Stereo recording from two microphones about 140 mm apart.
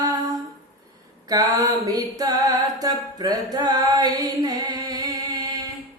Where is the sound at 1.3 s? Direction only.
25° right (ahead or behind).